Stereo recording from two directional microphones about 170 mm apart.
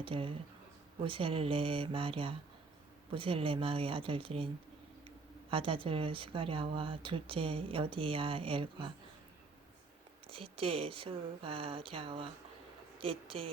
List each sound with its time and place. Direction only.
0.0 s speech: 30° right (ahead or behind)
10.2 s speech: 35° right (ahead or behind)